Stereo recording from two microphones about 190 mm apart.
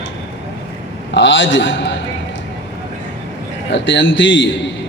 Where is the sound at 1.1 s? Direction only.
75° left (ahead or behind).